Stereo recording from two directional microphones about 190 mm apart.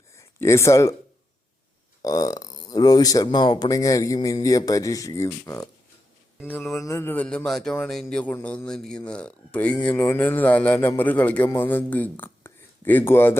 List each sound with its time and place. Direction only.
0.2 s speech: 15° left (ahead or behind)
2.0 s speech: 20° left (ahead or behind)
6.5 s speech: 5° left (ahead or behind)
6.7 s a man's voice: 15° left (ahead or behind)